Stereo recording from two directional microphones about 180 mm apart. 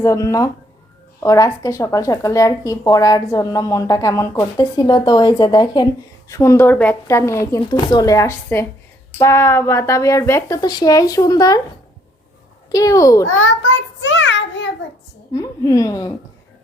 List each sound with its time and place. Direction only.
0.0 s speech: 20° left (ahead or behind)
12.7 s speech: 20° left (ahead or behind)
13.4 s a child's voice: 90° left
15.3 s speech: 20° left (ahead or behind)